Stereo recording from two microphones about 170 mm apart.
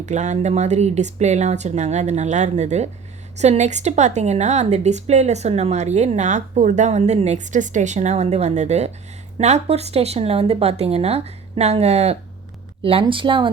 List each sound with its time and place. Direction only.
0.0 s a woman's voice: 45° right (ahead or behind)